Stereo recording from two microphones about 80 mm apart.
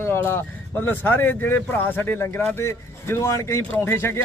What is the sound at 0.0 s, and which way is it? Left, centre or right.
Speech, left.